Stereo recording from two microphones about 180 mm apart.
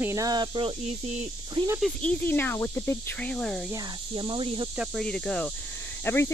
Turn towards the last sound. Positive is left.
turn(degrees=10)  # may be behind; listen again after turning